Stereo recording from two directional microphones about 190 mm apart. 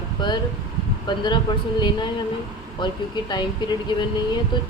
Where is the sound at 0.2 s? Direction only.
25° left (ahead or behind).